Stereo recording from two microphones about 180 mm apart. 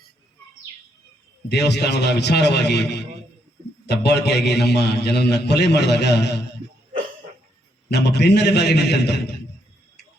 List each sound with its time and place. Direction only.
1.5 s a man's voice: 70° left (ahead or behind)
7.9 s a man's voice: 65° left (ahead or behind)